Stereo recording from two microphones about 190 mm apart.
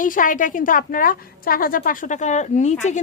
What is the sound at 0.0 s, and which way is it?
A woman's voice, 45° left (ahead or behind).